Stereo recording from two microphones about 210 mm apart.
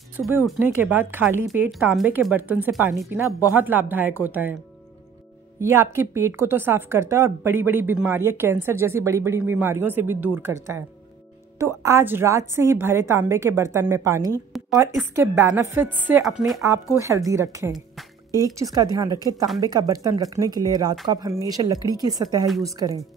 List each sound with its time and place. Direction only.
0.1 s a woman's voice: 5° right (ahead or behind)
5.6 s a woman's voice: 10° right (ahead or behind)
14.5 s a sound: centre (ahead or behind)
15.0 s a woman's voice: 10° right (ahead or behind)
16.6 s a woman's voice: 15° right (ahead or behind)